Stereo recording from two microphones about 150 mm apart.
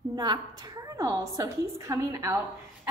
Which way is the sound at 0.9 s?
25° right (ahead or behind).